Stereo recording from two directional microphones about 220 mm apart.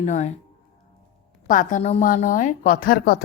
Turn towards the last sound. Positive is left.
turn(degrees=45)  # may be behind; listen again after turning